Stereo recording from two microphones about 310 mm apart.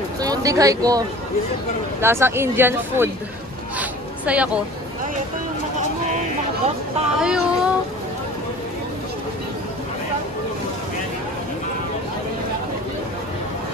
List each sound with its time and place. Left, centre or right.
0.2 s speech: centre
4.3 s speech: centre
7.2 s a sound: centre